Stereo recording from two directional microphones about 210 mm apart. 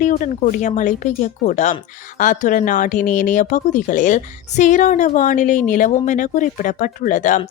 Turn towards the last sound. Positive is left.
turn(degrees=35)  # may be behind; listen again after turning